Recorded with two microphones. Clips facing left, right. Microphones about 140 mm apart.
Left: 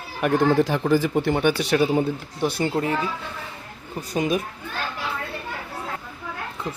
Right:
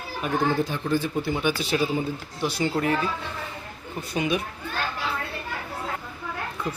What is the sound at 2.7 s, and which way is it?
Speech, 25° left (ahead or behind).